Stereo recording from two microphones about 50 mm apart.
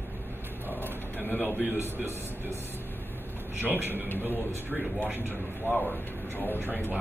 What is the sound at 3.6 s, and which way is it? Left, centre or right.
Speech, right.